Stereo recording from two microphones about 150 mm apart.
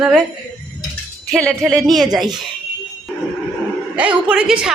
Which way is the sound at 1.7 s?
Centre (ahead or behind).